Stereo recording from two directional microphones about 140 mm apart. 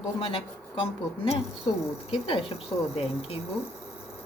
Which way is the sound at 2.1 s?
40° left (ahead or behind).